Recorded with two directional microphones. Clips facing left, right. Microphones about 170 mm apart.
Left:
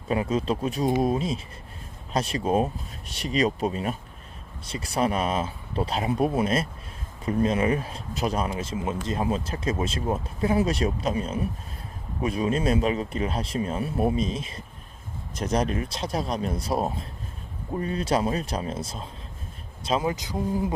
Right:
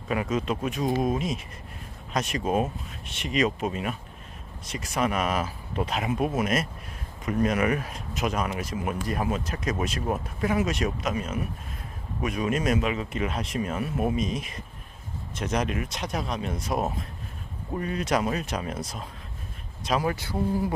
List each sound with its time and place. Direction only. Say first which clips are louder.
0.1 s speech: left 2 dB; 30° left (ahead or behind)